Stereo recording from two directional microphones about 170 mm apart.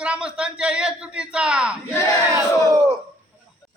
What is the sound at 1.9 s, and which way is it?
Battle cry, 15° left (ahead or behind).